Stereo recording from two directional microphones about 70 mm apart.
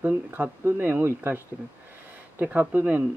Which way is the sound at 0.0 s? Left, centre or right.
Right.